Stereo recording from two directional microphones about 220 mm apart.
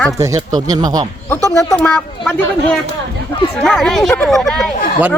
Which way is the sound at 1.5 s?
15° left (ahead or behind).